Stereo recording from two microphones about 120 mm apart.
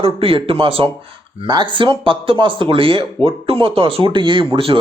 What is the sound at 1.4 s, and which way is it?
Speech, 40° right (ahead or behind).